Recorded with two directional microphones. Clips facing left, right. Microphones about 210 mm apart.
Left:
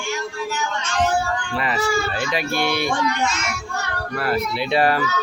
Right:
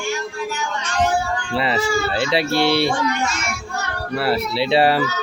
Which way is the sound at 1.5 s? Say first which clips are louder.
Right 3 dB; 25° right (ahead or behind).